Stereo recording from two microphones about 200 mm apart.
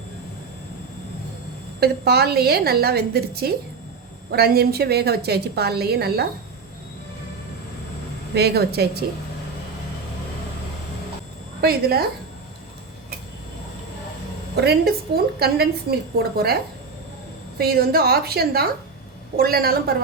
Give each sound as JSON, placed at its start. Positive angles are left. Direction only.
{"t": 1.8, "sound": "a woman's voice", "side_deg": -50}
{"t": 8.4, "sound": "a woman's voice", "side_deg": -55}
{"t": 11.6, "sound": "a woman's voice", "side_deg": -50}
{"t": 14.5, "sound": "a woman's voice", "side_deg": -55}
{"t": 17.6, "sound": "a woman's voice", "side_deg": -50}